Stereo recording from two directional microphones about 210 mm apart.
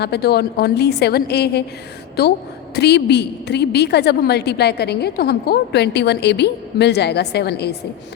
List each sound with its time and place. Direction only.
0.0 s a woman's voice: 50° left (ahead or behind)